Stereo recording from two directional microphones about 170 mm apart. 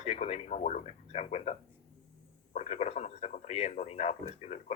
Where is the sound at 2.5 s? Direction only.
40° left (ahead or behind).